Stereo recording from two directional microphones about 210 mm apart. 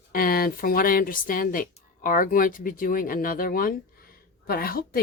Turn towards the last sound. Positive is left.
turn(degrees=45)  # may be behind; listen again after turning